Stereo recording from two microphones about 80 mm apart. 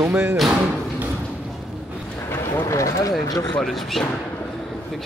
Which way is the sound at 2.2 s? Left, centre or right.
Left.